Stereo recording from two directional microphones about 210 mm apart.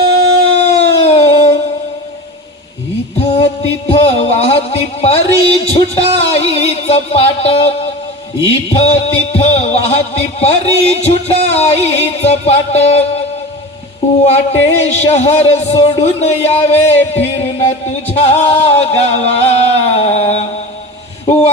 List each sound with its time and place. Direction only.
0.5 s music: 30° left (ahead or behind)
3.2 s a sound: 25° left (ahead or behind)
8.4 s music: 25° left (ahead or behind)
11.4 s speech: 30° left (ahead or behind)
14.3 s speech: 30° left (ahead or behind)
18.1 s music: 30° left (ahead or behind)